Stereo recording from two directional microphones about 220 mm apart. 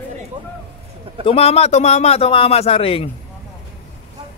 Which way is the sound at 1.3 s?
25° left (ahead or behind).